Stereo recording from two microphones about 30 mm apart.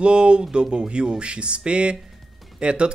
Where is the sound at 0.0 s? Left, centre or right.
Right.